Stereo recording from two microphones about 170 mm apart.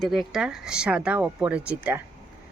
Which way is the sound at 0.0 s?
Centre (ahead or behind).